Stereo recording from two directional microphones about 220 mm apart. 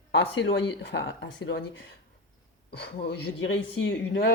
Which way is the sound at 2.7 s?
50° left (ahead or behind).